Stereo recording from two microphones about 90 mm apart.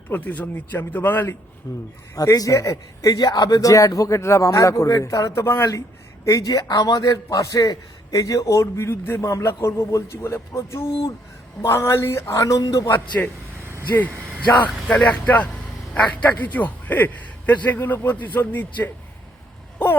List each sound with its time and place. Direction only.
0.1 s a man's voice: 20° left (ahead or behind)
1.7 s a man's voice: 35° left (ahead or behind)
8.7 s a man's voice: 30° left (ahead or behind)
13.2 s speech: 15° left (ahead or behind)
14.6 s a man's voice: 15° left (ahead or behind)